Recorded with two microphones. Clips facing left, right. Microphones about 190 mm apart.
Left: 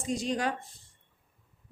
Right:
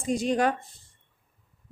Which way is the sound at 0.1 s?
55° right (ahead or behind).